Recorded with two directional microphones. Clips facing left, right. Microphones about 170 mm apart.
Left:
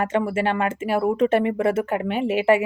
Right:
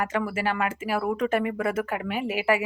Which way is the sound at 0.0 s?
25° left (ahead or behind).